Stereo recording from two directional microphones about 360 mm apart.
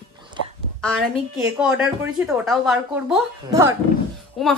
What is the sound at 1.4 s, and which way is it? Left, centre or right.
A woman's voice, centre.